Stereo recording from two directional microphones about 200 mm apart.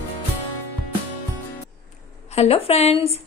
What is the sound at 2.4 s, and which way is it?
Speech, 30° left (ahead or behind).